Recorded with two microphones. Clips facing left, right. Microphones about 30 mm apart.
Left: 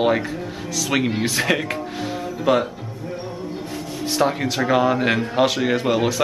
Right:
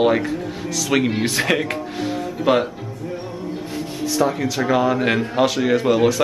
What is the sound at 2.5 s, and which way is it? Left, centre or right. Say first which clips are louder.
Speech: right 1 dB; right.